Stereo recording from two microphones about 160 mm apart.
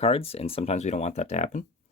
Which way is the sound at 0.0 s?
40° left (ahead or behind).